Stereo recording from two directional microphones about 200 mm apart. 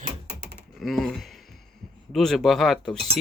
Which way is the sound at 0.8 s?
Centre (ahead or behind).